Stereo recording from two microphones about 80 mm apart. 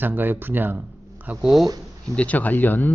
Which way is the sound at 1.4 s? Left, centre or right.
Centre.